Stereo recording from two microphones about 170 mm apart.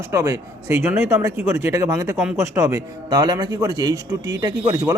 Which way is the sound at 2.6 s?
20° right (ahead or behind).